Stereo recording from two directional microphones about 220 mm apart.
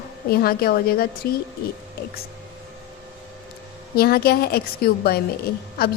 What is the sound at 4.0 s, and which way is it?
A woman's voice, 45° left (ahead or behind).